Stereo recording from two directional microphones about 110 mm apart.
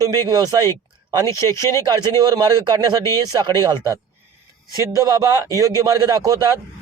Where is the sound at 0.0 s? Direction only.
35° right (ahead or behind).